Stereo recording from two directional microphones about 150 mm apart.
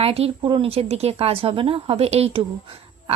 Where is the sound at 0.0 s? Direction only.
40° right (ahead or behind).